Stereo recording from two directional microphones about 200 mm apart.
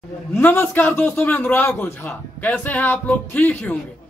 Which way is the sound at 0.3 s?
10° left (ahead or behind).